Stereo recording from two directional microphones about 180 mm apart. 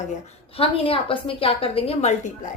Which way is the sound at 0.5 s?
30° left (ahead or behind).